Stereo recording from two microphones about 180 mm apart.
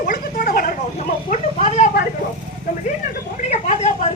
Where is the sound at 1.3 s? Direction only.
35° left (ahead or behind).